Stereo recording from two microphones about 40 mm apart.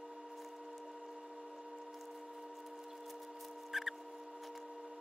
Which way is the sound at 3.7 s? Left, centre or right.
Centre.